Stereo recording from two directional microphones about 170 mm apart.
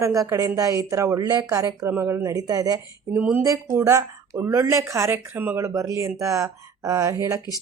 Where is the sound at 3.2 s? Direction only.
10° right (ahead or behind).